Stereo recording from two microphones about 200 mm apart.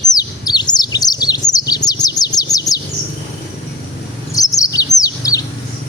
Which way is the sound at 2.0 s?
20° left (ahead or behind).